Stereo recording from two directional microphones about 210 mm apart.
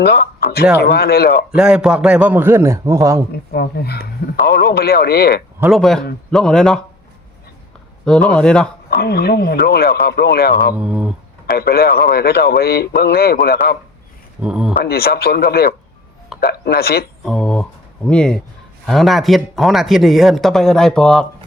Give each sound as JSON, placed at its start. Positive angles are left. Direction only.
{"t": 0.0, "sound": "speech", "side_deg": 45}
{"t": 1.5, "sound": "a man's voice", "side_deg": -5}
{"t": 3.5, "sound": "speech", "side_deg": 50}
{"t": 5.5, "sound": "speech", "side_deg": -10}
{"t": 5.8, "sound": "a man's voice", "side_deg": 0}
{"t": 8.0, "sound": "a man's voice", "side_deg": 5}
{"t": 9.0, "sound": "speech", "side_deg": 50}
{"t": 10.8, "sound": "a man's voice", "side_deg": -5}
{"t": 11.4, "sound": "speech", "side_deg": 50}
{"t": 14.4, "sound": "a man's voice", "side_deg": -5}
{"t": 14.8, "sound": "speech", "side_deg": 50}
{"t": 17.2, "sound": "a man's voice", "side_deg": 0}